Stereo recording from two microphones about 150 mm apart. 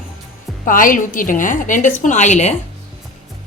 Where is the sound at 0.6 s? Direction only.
65° left (ahead or behind).